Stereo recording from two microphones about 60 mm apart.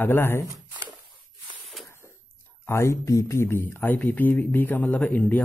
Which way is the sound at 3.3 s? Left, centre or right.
Left.